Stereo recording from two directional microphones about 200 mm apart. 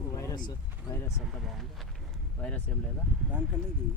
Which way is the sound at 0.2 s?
20° left (ahead or behind).